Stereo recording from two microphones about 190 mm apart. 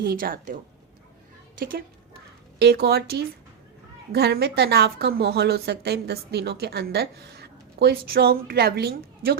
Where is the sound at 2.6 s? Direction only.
55° right (ahead or behind).